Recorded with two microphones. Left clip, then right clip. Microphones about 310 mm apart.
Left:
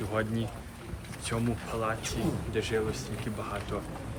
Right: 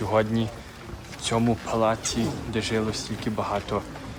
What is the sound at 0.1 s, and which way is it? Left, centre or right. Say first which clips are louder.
Speech: right 10 dB; centre.